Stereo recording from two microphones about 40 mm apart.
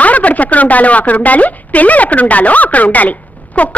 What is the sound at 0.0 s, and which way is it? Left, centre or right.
A woman's voice, left.